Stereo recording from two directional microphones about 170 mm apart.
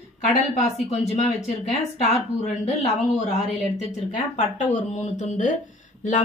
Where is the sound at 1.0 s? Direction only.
40° left (ahead or behind).